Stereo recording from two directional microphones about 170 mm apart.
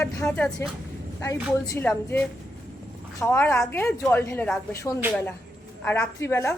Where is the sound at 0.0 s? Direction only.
15° left (ahead or behind).